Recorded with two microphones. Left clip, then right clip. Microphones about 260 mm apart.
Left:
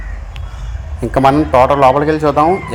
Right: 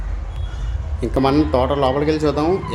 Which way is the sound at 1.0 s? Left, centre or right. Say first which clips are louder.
Left 6 dB; centre.